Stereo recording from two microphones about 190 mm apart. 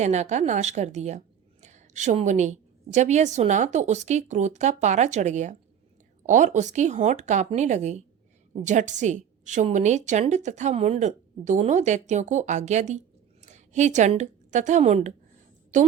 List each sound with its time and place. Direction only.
0.0 s a woman's voice: 35° right (ahead or behind)